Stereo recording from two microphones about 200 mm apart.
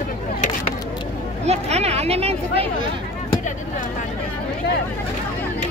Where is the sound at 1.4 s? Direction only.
35° right (ahead or behind).